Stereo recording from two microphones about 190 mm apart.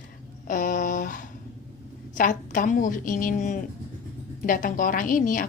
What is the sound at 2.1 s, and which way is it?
A woman's voice, 45° left (ahead or behind).